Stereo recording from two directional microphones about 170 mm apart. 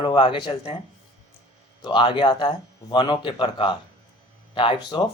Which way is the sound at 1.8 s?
30° left (ahead or behind).